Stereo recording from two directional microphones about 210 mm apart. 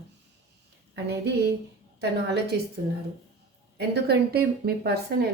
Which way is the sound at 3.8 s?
50° right (ahead or behind).